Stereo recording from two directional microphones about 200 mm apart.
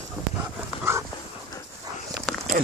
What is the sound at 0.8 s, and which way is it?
Dog, 15° right (ahead or behind).